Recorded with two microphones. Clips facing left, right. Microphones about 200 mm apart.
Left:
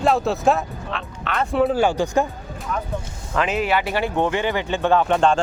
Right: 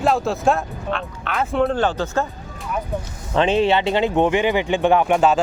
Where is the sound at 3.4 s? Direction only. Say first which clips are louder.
Right 4 dB; 30° right (ahead or behind).